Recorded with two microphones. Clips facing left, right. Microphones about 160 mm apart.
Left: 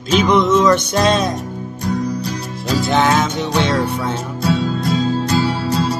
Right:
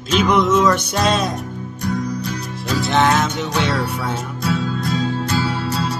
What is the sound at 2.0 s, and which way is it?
Music, 35° left (ahead or behind).